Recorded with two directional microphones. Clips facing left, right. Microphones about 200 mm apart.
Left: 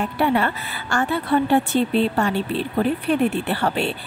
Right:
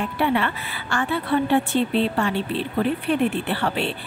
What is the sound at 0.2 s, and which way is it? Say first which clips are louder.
A woman's voice: left 2 dB; 40° left (ahead or behind).